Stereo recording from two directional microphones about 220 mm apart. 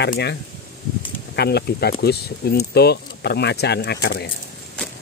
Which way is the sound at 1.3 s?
45° left (ahead or behind).